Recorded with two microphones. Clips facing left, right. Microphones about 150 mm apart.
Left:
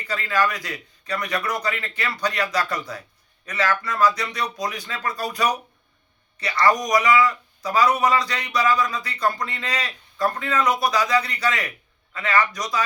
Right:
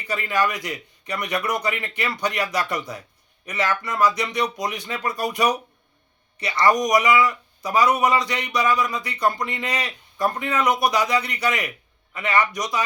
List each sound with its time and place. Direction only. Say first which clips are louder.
0.1 s a man's voice: even; 20° right (ahead or behind)